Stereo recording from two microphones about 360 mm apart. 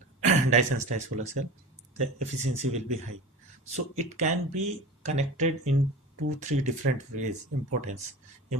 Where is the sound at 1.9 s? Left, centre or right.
Centre.